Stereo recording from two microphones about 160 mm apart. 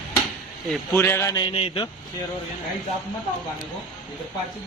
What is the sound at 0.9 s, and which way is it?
Speech, 15° left (ahead or behind).